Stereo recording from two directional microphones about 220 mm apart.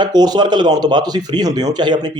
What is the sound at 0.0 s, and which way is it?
Speech, 20° right (ahead or behind).